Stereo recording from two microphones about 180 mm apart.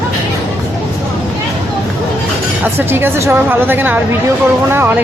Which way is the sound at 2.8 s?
10° right (ahead or behind).